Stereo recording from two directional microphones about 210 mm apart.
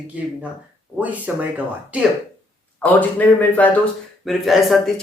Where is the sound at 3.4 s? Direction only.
10° left (ahead or behind).